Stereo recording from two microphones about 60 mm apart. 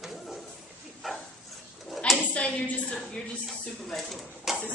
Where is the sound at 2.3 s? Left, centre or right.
Left.